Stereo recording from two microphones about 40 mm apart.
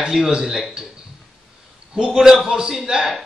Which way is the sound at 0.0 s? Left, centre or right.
Right.